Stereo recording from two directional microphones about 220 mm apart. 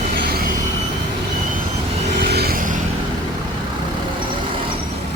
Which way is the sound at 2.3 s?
45° right (ahead or behind).